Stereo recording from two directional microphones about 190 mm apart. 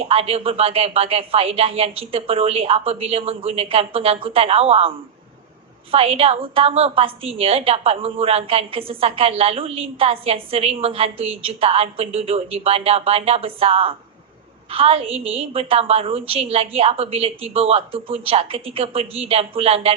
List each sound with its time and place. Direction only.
0.0 s a woman's voice: 30° right (ahead or behind)